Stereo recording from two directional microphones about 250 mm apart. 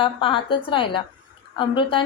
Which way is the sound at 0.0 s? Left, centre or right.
Centre.